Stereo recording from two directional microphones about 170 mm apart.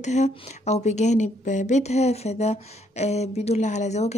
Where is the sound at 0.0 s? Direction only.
45° left (ahead or behind).